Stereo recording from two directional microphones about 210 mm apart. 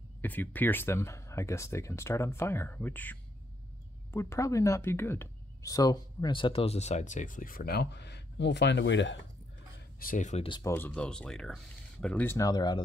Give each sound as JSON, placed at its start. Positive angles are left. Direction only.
{"t": 0.2, "sound": "speech", "side_deg": 10}
{"t": 9.9, "sound": "speech", "side_deg": 40}
{"t": 10.7, "sound": "speech", "side_deg": 10}